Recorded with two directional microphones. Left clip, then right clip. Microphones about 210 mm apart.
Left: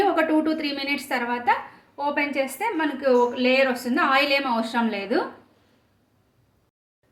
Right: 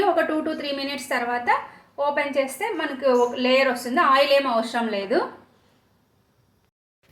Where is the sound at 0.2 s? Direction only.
30° left (ahead or behind).